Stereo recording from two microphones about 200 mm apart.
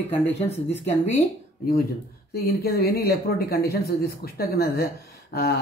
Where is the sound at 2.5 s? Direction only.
50° left (ahead or behind).